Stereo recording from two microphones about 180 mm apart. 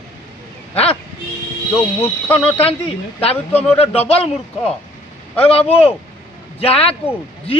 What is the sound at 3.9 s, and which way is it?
Speech, 35° left (ahead or behind).